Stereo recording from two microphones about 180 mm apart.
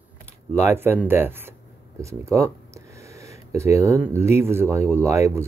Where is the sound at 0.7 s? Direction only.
10° right (ahead or behind).